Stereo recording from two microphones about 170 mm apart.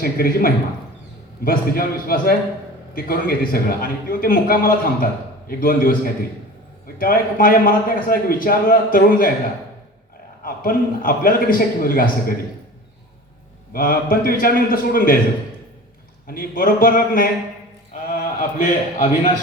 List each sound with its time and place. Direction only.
0.0 s a man's voice: 60° left (ahead or behind)
10.4 s a man's voice: 55° left (ahead or behind)
13.7 s a man's voice: 60° left (ahead or behind)
16.2 s a man's voice: 60° left (ahead or behind)